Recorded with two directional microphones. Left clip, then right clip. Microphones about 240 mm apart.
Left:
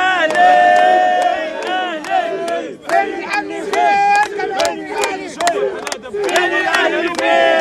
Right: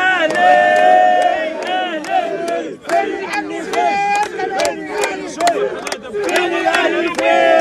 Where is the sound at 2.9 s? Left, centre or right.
Left.